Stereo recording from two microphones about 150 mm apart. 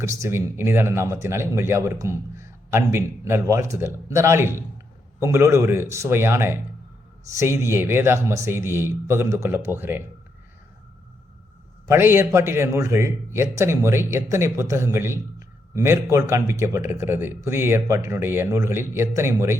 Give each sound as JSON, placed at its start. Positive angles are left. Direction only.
{"t": 0.0, "sound": "a man's voice", "side_deg": -20}
{"t": 11.9, "sound": "a man's voice", "side_deg": -15}